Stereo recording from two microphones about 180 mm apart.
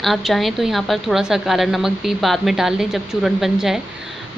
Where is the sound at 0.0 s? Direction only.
Centre (ahead or behind).